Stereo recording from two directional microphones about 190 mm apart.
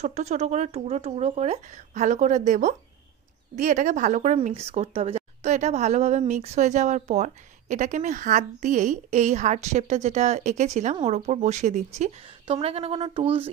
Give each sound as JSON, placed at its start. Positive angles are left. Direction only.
{"t": 0.0, "sound": "speech", "side_deg": -35}